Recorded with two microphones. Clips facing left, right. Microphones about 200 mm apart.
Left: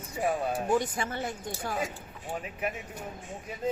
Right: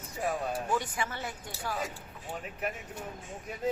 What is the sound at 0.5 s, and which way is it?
Speech, 40° left (ahead or behind).